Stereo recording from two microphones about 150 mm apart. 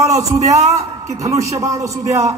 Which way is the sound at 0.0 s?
20° right (ahead or behind).